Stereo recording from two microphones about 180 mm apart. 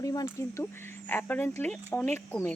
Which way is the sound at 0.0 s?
20° left (ahead or behind).